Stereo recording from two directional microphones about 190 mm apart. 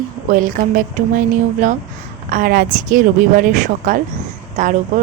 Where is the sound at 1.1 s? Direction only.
40° right (ahead or behind).